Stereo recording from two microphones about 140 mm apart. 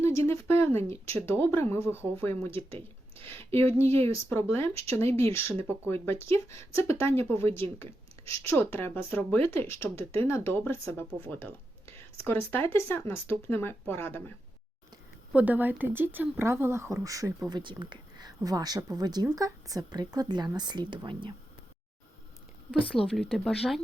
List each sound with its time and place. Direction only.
0.0 s speech: 20° left (ahead or behind)
2.5 s speech: 40° right (ahead or behind)
3.2 s speech: 15° left (ahead or behind)
10.0 s speech: 45° right (ahead or behind)
10.2 s speech: 20° left (ahead or behind)
15.3 s a woman's voice: 10° right (ahead or behind); by 21.3 s 35° right (ahead or behind)
23.0 s speech: centre (ahead or behind)